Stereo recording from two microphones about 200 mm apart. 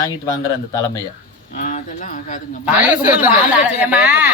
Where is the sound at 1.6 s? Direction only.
40° left (ahead or behind).